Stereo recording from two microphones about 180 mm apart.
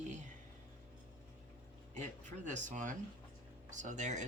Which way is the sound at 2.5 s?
45° right (ahead or behind).